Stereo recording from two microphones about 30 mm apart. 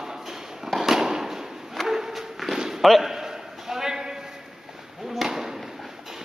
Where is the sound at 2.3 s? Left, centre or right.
Centre.